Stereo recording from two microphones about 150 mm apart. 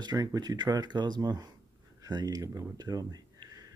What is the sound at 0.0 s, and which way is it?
Speech, 25° right (ahead or behind).